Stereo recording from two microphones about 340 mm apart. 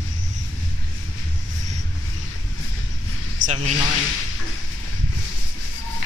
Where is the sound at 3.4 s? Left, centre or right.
Centre.